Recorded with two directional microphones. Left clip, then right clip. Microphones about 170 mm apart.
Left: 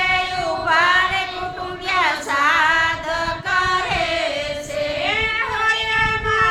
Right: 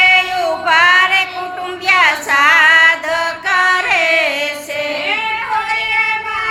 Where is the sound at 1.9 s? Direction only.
20° right (ahead or behind).